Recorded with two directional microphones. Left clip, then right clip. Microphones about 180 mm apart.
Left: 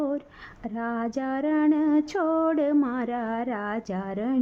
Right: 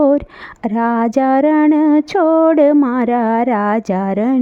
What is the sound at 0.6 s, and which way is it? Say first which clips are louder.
Speech: right 14 dB; 50° right (ahead or behind).